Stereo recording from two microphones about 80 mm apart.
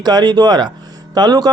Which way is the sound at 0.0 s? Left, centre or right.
Right.